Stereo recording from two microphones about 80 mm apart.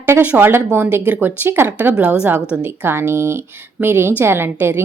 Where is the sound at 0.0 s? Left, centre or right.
Right.